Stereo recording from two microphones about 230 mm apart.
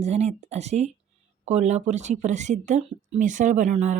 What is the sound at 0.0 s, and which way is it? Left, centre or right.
Speech, right.